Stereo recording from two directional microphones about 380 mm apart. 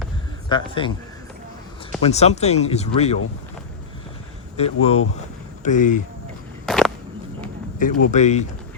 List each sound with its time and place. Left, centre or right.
0.4 s speech: centre
2.0 s speech: centre
4.5 s speech: centre
6.7 s a sound: centre
7.8 s speech: left